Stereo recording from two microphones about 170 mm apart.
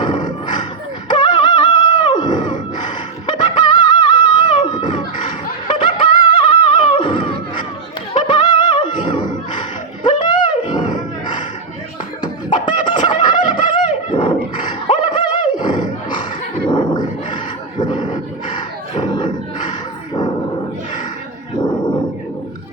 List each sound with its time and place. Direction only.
0.0 s a sound: 25° left (ahead or behind)
1.0 s crowd: 25° left (ahead or behind)
8.1 s music: 30° left (ahead or behind)
12.6 s a sound: 30° left (ahead or behind)
14.1 s roar: 30° left (ahead or behind)
16.6 s dog: 25° left (ahead or behind)
21.6 s dog: 25° left (ahead or behind)